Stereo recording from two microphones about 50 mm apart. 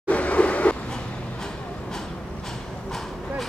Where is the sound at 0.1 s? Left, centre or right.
Left.